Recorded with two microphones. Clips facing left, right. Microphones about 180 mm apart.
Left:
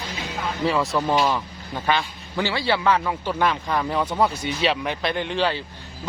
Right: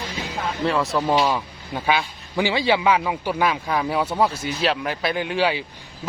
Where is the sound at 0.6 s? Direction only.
Centre (ahead or behind).